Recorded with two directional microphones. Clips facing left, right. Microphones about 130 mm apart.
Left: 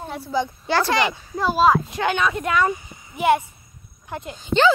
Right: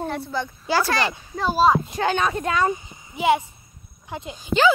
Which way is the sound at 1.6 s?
35° right (ahead or behind).